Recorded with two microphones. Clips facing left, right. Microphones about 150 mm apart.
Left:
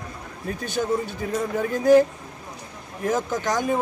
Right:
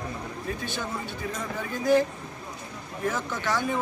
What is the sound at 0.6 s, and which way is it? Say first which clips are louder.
Speech: left 8 dB; 40° left (ahead or behind).